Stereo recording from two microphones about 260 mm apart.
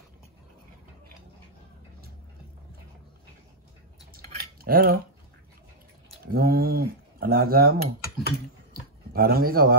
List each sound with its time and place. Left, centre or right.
4.1 s typing: right
6.2 s speech: right
9.1 s speech: right